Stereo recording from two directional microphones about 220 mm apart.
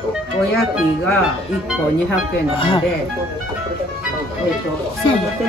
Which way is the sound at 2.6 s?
25° left (ahead or behind).